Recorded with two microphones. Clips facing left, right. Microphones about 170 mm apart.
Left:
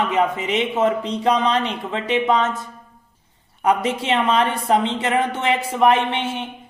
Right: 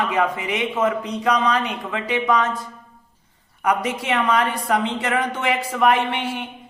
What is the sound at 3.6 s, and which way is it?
A man's voice, 25° left (ahead or behind).